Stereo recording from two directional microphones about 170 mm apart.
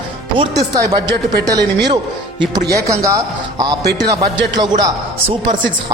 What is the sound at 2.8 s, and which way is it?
Speech, 20° right (ahead or behind).